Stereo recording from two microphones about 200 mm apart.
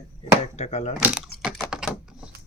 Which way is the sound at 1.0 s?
5° right (ahead or behind).